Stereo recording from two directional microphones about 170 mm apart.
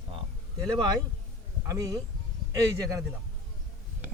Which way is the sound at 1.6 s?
20° right (ahead or behind).